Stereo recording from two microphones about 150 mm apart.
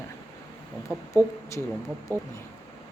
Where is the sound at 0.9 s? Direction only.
5° right (ahead or behind).